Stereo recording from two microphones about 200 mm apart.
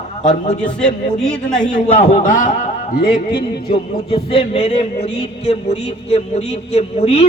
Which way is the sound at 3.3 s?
25° left (ahead or behind).